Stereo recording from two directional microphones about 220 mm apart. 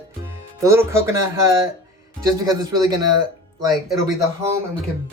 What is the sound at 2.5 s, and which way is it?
Speech, 15° right (ahead or behind).